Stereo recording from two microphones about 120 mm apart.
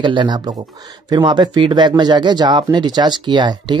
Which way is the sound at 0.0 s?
40° right (ahead or behind).